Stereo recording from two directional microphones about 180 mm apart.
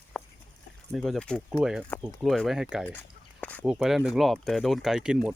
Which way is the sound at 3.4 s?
10° left (ahead or behind).